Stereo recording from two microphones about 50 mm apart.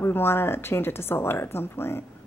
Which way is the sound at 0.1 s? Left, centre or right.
Left.